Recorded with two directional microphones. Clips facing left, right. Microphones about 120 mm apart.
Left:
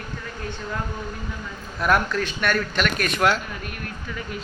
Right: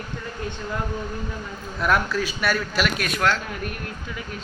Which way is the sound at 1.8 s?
Centre (ahead or behind).